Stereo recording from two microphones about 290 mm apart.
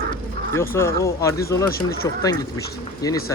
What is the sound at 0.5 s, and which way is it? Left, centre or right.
Speech, centre.